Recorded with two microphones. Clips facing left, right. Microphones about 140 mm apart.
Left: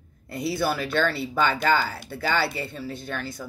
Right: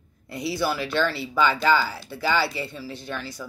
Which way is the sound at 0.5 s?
50° left (ahead or behind).